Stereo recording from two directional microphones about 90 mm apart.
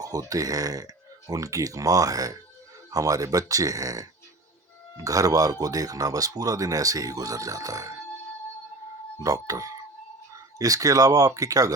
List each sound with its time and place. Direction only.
0.0 s speech: 45° right (ahead or behind)
5.0 s speech: 40° right (ahead or behind)
9.1 s speech: 40° right (ahead or behind)